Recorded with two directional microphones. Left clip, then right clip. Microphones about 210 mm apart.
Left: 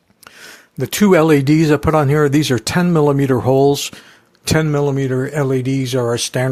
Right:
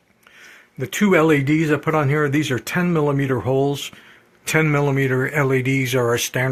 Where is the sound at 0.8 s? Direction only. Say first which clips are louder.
Left 4 dB; 50° left (ahead or behind).